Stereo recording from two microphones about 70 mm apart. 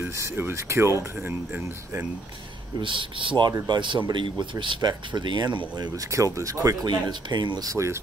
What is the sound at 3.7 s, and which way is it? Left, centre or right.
Speech, right.